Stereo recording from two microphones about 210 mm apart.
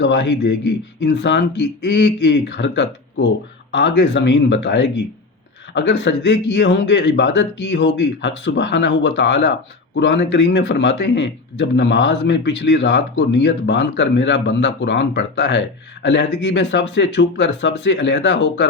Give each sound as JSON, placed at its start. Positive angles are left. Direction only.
{"t": 0.0, "sound": "a man's voice", "side_deg": 55}